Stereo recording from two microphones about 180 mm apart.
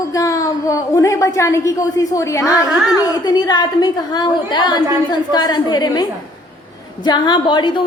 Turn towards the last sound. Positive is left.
turn(degrees=25)  # may be behind; listen again after turning